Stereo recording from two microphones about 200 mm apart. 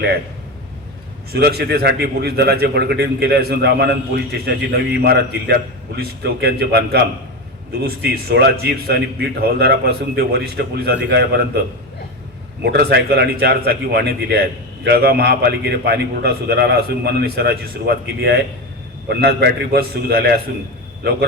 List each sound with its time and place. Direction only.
1.3 s a man's voice: 50° right (ahead or behind)
12.6 s a man's voice: 50° right (ahead or behind)